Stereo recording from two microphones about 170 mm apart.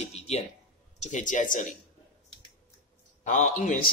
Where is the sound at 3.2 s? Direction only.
50° left (ahead or behind).